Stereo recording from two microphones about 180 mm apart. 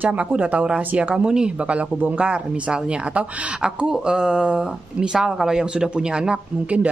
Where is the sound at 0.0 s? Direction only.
10° right (ahead or behind).